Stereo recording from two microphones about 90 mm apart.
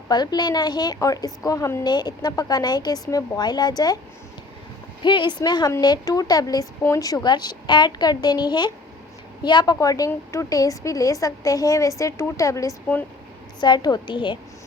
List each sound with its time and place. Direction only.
0.1 s a woman's voice: 50° left (ahead or behind)
1.8 s a woman's voice: 50° left (ahead or behind)
5.0 s a woman's voice: 55° left (ahead or behind)
9.8 s a woman's voice: 40° left (ahead or behind)
13.6 s a woman's voice: 50° left (ahead or behind)